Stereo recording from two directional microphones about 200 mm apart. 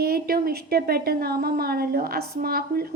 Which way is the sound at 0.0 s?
50° right (ahead or behind).